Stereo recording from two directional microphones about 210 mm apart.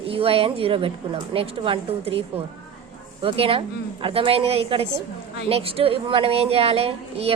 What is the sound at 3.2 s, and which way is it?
Speech, 25° right (ahead or behind).